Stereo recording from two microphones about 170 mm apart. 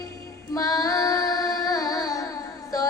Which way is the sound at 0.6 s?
20° left (ahead or behind).